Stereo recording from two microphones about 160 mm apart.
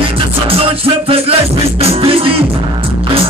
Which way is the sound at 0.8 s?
35° right (ahead or behind).